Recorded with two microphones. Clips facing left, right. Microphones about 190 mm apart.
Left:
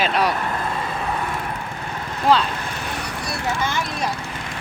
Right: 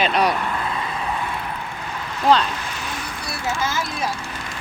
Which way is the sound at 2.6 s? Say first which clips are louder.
Left 2 dB; 55° left (ahead or behind).